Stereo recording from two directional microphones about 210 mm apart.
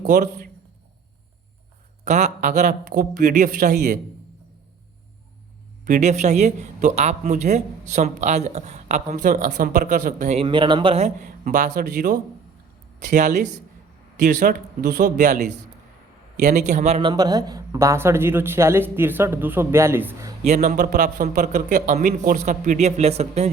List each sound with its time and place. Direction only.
0.0 s a man's voice: 35° right (ahead or behind)
2.0 s a man's voice: 35° right (ahead or behind)
5.8 s a man's voice: 35° right (ahead or behind)
14.3 s speech: 50° right (ahead or behind); by 20.3 s 10° right (ahead or behind)
20.4 s a man's voice: 35° right (ahead or behind)